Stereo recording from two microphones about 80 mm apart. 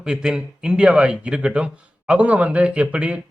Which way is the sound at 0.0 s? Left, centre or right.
Centre.